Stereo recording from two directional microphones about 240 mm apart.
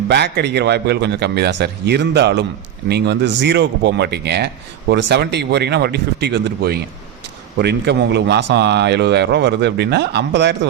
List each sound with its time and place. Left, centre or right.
0.1 s speech: right